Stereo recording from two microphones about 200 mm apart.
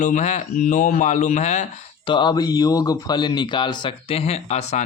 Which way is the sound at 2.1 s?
20° left (ahead or behind).